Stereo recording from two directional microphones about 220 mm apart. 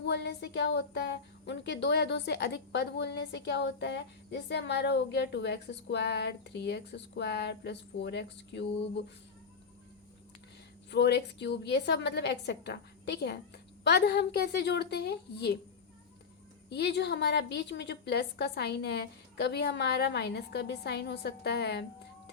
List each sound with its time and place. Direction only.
0.0 s speech: 50° left (ahead or behind)
10.9 s speech: 50° left (ahead or behind)
16.6 s speech: 50° left (ahead or behind)